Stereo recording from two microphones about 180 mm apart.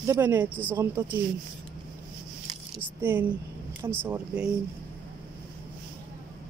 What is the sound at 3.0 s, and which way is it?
Speech, 10° right (ahead or behind).